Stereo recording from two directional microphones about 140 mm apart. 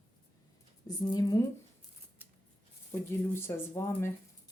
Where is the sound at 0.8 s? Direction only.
30° left (ahead or behind).